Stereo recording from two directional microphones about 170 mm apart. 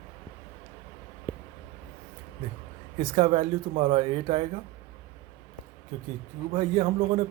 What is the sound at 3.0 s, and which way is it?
Speech, 30° right (ahead or behind).